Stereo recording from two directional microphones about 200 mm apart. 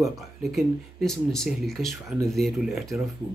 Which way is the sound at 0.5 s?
Centre (ahead or behind).